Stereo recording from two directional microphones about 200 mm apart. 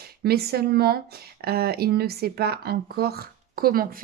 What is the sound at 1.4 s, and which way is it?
Speech, 50° right (ahead or behind).